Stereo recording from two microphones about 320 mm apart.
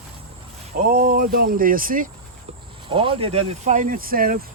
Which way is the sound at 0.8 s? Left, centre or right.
Right.